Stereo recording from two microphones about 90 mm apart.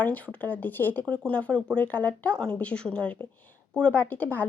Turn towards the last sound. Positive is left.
turn(degrees=20)  # may be behind; listen again after turning